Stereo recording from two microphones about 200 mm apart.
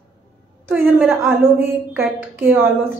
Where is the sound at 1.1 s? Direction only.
10° right (ahead or behind).